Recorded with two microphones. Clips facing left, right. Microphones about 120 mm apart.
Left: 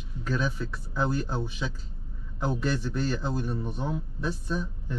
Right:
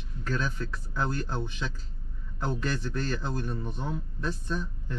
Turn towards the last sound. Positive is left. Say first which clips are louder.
# left 2 dB
turn(degrees=5)  # may be behind; listen again after turning